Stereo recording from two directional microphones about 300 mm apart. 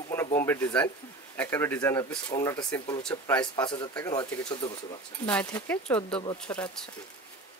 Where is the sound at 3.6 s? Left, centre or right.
Centre.